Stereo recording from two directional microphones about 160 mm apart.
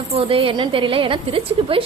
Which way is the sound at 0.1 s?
35° right (ahead or behind).